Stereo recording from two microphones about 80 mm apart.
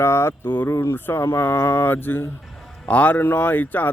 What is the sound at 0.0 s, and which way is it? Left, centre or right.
Speech, left.